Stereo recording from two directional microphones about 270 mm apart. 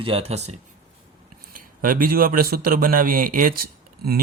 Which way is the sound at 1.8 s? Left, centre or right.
Right.